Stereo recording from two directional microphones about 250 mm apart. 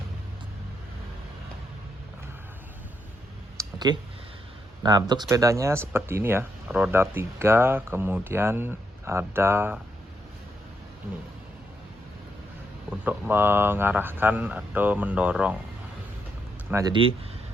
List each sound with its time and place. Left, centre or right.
3.6 s a sound: centre
4.8 s speech: centre
13.1 s speech: centre
16.6 s speech: centre